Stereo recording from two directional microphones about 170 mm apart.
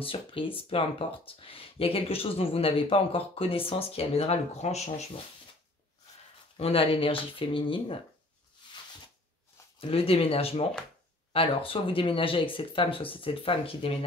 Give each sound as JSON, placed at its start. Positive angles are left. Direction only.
{"t": 0.0, "sound": "speech", "side_deg": 30}
{"t": 6.5, "sound": "speech", "side_deg": 35}
{"t": 9.8, "sound": "speech", "side_deg": 35}